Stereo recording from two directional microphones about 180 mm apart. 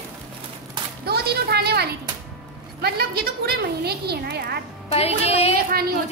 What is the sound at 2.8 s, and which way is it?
A woman's voice, 60° right (ahead or behind).